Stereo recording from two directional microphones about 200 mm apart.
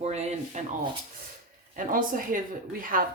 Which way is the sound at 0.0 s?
35° right (ahead or behind).